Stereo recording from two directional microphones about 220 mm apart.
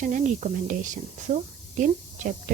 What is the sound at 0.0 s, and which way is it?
Speech, 35° right (ahead or behind).